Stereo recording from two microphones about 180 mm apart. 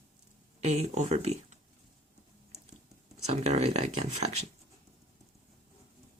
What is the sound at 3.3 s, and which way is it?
Speech, 35° right (ahead or behind).